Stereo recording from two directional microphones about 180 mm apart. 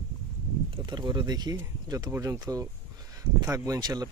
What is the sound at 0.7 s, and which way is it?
Speech, 25° right (ahead or behind).